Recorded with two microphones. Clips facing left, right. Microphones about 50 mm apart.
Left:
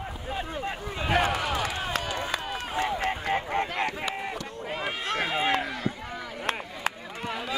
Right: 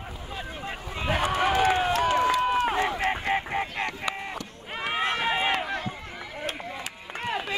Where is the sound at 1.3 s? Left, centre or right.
Right.